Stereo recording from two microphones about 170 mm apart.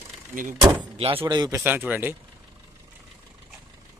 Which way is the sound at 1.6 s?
10° right (ahead or behind).